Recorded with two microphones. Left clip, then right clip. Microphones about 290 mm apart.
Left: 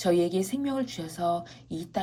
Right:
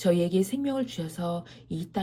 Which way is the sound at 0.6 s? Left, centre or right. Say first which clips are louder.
Right 1 dB; centre.